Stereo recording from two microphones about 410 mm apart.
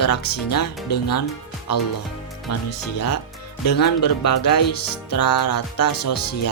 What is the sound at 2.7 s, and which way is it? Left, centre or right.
Speech, left.